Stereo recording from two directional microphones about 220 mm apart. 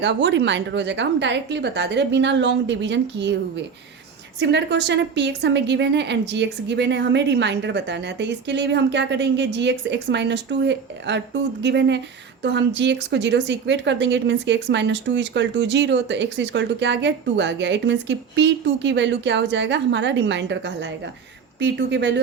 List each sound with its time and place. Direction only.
0.0 s speech: 55° right (ahead or behind)
4.4 s speech: 50° right (ahead or behind)